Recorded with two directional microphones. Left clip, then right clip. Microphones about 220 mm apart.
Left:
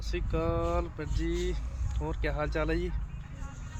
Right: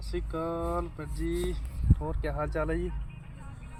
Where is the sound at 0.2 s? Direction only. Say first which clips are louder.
Left 1 dB; 35° left (ahead or behind).